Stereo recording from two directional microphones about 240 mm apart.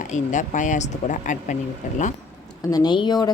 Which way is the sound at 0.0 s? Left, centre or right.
Left.